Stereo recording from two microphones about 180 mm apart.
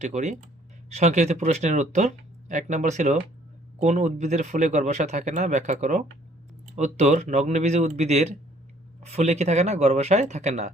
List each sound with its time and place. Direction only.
0.0 s speech: 40° right (ahead or behind)